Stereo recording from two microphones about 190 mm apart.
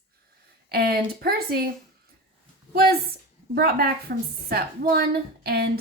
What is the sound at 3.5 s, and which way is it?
A woman's voice, 55° right (ahead or behind).